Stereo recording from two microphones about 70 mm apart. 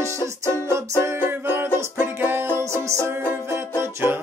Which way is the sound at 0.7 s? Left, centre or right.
Right.